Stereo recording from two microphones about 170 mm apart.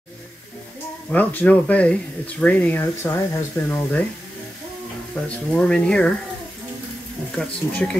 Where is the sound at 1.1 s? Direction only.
10° left (ahead or behind).